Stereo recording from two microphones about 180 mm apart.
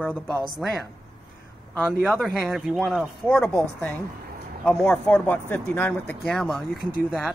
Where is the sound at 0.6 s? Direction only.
Centre (ahead or behind).